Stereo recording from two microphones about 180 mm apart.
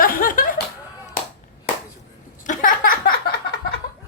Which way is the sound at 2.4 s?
45° left (ahead or behind).